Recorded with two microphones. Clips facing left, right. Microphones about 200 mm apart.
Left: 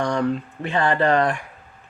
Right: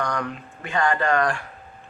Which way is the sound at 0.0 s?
30° left (ahead or behind).